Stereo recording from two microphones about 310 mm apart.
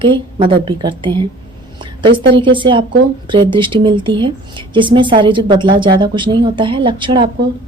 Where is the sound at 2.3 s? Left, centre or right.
Centre.